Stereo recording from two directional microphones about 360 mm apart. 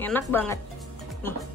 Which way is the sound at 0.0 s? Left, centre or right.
Centre.